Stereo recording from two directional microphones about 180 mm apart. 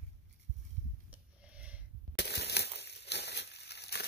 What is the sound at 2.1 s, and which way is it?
Crushing, 70° left (ahead or behind).